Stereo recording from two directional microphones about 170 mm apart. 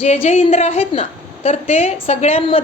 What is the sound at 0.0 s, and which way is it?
A woman's voice, 40° left (ahead or behind).